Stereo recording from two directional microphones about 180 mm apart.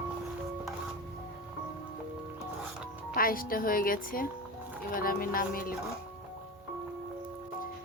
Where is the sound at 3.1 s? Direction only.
50° left (ahead or behind).